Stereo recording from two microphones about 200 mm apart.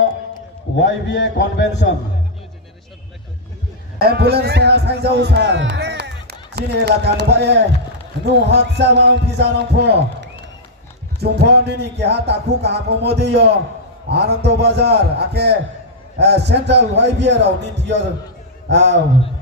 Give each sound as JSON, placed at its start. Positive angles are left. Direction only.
{"t": 0.8, "sound": "a man's voice", "side_deg": 60}
{"t": 4.0, "sound": "speech", "side_deg": -55}